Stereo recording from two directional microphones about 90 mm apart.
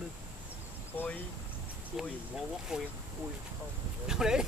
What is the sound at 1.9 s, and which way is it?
Speech, 5° right (ahead or behind).